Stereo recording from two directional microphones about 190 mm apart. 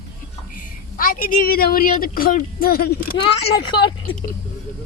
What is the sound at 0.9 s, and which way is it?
Speech, 50° left (ahead or behind).